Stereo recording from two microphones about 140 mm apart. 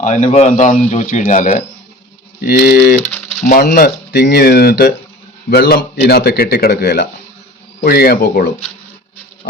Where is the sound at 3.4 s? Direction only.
75° left (ahead or behind).